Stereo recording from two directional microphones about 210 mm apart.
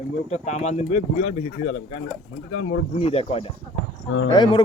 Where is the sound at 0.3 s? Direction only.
30° left (ahead or behind).